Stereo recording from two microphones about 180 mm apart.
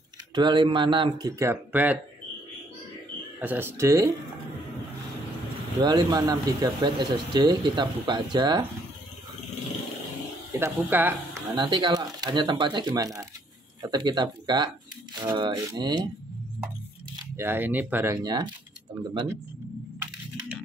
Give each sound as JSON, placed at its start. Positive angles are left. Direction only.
{"t": 0.3, "sound": "speech", "side_deg": -25}
{"t": 3.3, "sound": "speech", "side_deg": -10}
{"t": 5.8, "sound": "speech", "side_deg": -20}
{"t": 10.6, "sound": "speech", "side_deg": -10}
{"t": 11.5, "sound": "speech", "side_deg": -25}
{"t": 17.4, "sound": "speech", "side_deg": -10}